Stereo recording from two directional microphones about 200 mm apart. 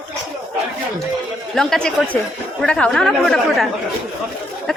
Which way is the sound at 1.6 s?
5° left (ahead or behind).